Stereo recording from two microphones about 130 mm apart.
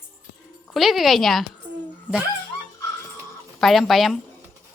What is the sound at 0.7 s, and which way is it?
Speech, centre (ahead or behind).